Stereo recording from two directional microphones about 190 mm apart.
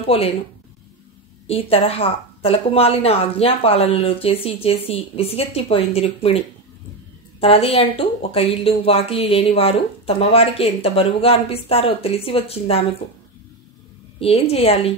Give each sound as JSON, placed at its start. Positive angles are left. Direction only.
{"t": 0.0, "sound": "a woman's voice", "side_deg": 30}
{"t": 1.5, "sound": "speech", "side_deg": 30}
{"t": 14.2, "sound": "speech", "side_deg": 30}